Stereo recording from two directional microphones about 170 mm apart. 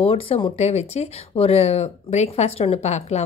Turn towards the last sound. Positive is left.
turn(degrees=40)  # may be behind; listen again after turning